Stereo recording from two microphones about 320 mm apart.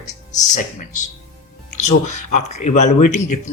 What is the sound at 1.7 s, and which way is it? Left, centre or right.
Speech, left.